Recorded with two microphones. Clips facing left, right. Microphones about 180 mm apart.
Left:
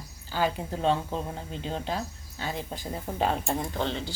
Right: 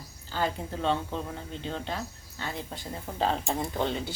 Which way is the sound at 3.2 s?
10° left (ahead or behind).